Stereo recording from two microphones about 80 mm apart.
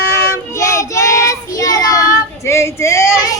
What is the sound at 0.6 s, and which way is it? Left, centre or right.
Child singing, left.